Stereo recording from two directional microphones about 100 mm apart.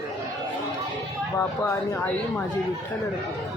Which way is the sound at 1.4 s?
25° left (ahead or behind).